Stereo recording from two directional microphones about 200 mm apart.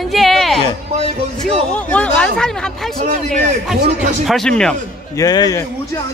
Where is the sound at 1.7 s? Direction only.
5° left (ahead or behind).